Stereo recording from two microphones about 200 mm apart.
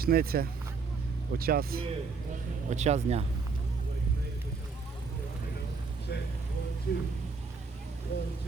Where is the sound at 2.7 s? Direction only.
35° right (ahead or behind).